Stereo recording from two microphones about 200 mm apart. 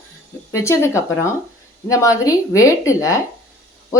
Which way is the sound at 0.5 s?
15° left (ahead or behind).